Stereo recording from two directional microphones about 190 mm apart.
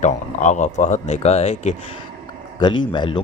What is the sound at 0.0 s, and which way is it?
Speech, 40° left (ahead or behind).